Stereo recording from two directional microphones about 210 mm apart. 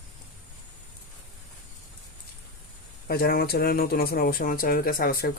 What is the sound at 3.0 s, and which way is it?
Speech, 45° left (ahead or behind).